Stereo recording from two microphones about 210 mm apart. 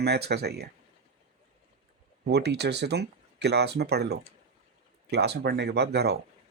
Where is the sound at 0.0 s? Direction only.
50° right (ahead or behind).